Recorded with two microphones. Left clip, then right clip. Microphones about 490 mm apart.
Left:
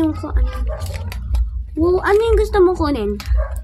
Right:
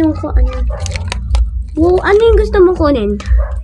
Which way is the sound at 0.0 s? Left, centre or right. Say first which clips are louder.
Right 6 dB; left.